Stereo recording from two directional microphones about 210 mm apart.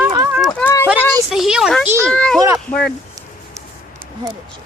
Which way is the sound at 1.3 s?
5° right (ahead or behind).